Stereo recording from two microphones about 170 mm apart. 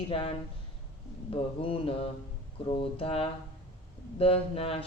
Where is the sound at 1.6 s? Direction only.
30° left (ahead or behind).